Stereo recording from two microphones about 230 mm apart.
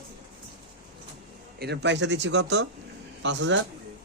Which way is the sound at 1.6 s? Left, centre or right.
Right.